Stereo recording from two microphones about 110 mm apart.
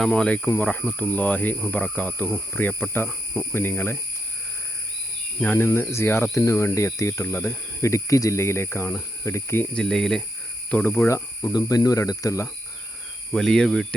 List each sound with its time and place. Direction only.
0.0 s speech: 10° left (ahead or behind)
5.4 s speech: 20° left (ahead or behind)
9.7 s speech: 5° left (ahead or behind)
10.9 s speech: 25° left (ahead or behind)
13.3 s speech: 5° left (ahead or behind)